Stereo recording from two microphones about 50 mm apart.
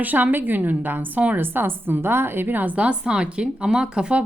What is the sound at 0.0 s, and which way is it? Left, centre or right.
Speech, right.